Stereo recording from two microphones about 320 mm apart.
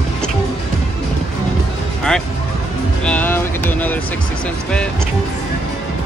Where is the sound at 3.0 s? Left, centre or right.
Centre.